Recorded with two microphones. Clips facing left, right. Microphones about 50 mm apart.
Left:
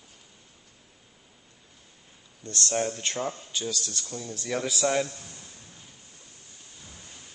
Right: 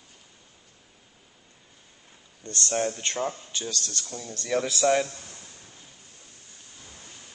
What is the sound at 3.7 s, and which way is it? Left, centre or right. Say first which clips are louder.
Speech: right 1 dB; centre.